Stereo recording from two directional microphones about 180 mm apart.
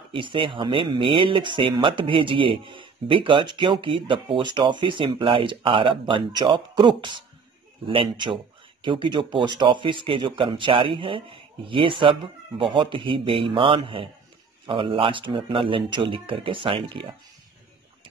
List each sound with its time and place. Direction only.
0.1 s speech: 30° right (ahead or behind)